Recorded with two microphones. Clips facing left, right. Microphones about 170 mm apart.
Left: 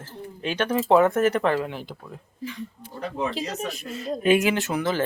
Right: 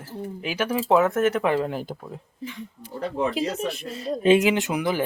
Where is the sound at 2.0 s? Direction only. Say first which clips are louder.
Even; 25° right (ahead or behind).